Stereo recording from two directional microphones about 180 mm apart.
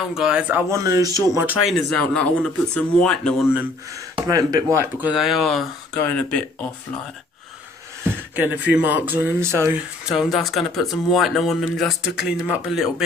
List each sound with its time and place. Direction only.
0.1 s speech: 5° right (ahead or behind)
1.5 s speech: centre (ahead or behind)
4.1 s speech: 20° right (ahead or behind)
5.0 s speech: 5° right (ahead or behind)
8.0 s speech: 10° right (ahead or behind)